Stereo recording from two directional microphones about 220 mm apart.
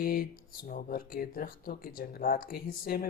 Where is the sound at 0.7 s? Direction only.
40° left (ahead or behind).